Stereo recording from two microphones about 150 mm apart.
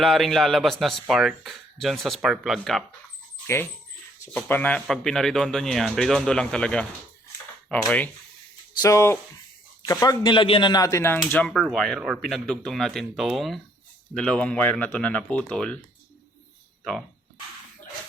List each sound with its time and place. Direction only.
0.0 s speech: centre (ahead or behind)
3.4 s speech: 15° left (ahead or behind)
8.8 s speech: 20° left (ahead or behind)
11.4 s speech: centre (ahead or behind)